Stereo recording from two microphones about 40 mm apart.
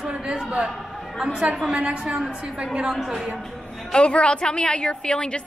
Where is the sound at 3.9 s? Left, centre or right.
Left.